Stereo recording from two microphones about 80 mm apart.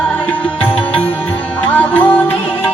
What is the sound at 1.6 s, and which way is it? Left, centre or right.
Music, centre.